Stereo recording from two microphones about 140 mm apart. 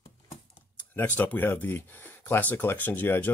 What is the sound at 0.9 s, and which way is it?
Speech, 10° left (ahead or behind).